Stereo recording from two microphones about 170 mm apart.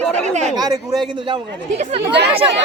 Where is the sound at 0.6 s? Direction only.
25° right (ahead or behind).